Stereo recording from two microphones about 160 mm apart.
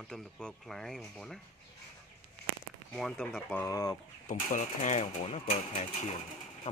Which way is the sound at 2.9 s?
5° left (ahead or behind).